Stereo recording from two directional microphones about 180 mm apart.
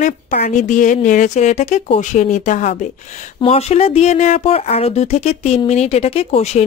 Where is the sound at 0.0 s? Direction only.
45° left (ahead or behind).